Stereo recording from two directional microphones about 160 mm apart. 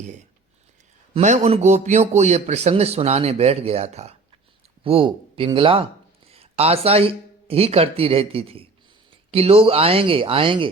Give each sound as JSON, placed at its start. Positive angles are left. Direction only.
{"t": 1.1, "sound": "a man's voice", "side_deg": -45}